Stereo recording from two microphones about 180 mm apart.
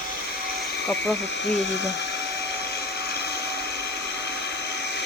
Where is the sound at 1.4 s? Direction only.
75° left (ahead or behind).